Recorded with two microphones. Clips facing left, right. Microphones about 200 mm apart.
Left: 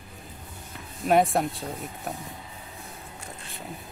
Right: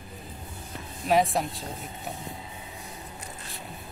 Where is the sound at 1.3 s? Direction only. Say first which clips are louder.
Left 3 dB; 55° left (ahead or behind).